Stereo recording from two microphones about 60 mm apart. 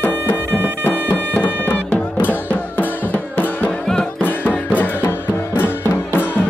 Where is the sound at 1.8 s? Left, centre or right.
Left.